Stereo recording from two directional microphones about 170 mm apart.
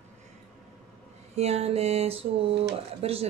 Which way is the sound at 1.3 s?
40° right (ahead or behind).